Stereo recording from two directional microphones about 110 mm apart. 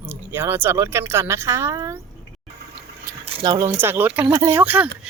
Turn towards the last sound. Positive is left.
turn(degrees=-10)  # may be behind; listen again after turning